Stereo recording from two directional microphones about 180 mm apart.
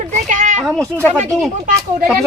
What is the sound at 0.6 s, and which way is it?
Speech, 5° left (ahead or behind).